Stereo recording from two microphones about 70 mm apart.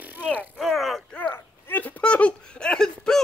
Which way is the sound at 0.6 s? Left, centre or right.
Centre.